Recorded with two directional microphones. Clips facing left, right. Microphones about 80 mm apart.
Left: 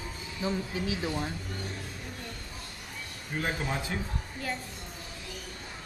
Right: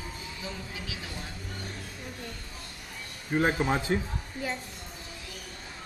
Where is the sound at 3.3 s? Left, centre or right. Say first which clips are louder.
Right 6 dB; right.